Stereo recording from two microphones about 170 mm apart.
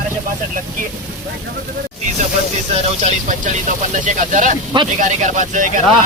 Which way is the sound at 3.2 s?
50° right (ahead or behind).